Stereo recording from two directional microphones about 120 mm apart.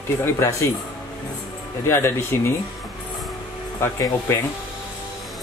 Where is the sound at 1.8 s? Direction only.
20° left (ahead or behind).